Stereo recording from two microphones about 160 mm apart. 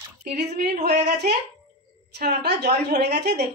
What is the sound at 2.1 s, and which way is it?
A woman's voice, 85° right.